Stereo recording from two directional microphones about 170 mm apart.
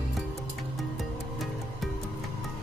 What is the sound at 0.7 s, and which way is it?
Music, centre (ahead or behind).